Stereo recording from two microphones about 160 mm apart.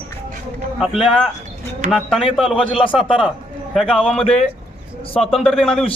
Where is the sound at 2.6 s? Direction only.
35° left (ahead or behind).